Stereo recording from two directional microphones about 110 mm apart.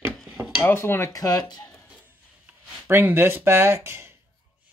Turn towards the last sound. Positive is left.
turn(degrees=-25)  # may be behind; listen again after turning